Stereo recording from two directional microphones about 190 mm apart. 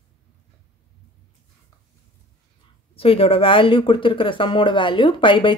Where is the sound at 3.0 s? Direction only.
30° left (ahead or behind).